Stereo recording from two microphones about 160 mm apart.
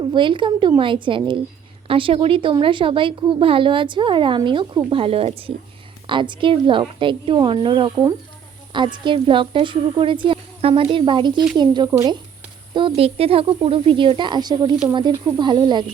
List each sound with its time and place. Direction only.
0.0 s a woman's voice: 30° right (ahead or behind)
13.0 s a woman's voice: 35° right (ahead or behind)